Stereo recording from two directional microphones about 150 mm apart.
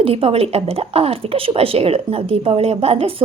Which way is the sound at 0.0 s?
40° right (ahead or behind).